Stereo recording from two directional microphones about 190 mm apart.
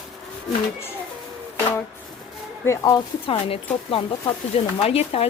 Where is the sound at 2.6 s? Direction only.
15° left (ahead or behind).